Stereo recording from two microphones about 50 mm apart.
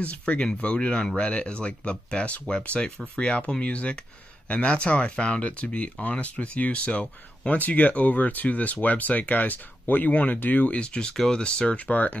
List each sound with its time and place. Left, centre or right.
0.0 s speech: left
10.8 s speech: centre
11.8 s speech: left